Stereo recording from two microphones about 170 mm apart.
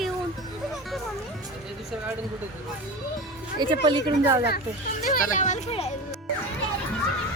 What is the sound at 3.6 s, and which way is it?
Speech, 30° right (ahead or behind).